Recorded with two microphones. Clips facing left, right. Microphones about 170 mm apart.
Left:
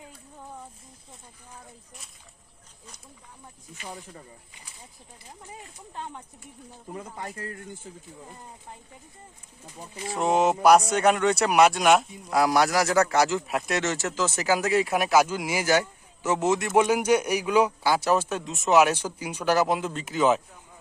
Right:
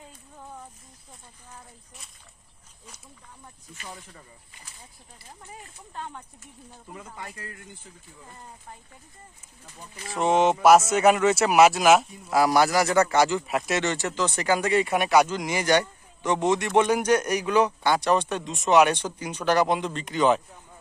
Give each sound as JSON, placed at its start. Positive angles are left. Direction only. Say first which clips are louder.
{"t": 3.8, "sound": "speech", "louder": "left 3 dB", "side_deg": 15}
{"t": 5.5, "sound": "speech", "louder": "even", "side_deg": 20}
{"t": 6.9, "sound": "speech", "louder": "left 4 dB", "side_deg": 40}
{"t": 9.7, "sound": "speech", "louder": "left 5 dB", "side_deg": 25}
{"t": 10.1, "sound": "a man's voice", "louder": "right 1 dB", "side_deg": 0}